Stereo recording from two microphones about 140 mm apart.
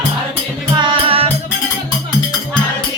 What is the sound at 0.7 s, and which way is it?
Music, 40° right (ahead or behind).